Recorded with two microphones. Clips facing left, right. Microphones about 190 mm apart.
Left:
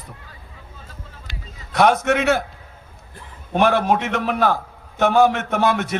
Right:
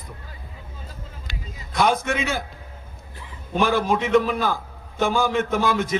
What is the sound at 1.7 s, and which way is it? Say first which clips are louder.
A man's voice: left 5 dB; 65° left (ahead or behind).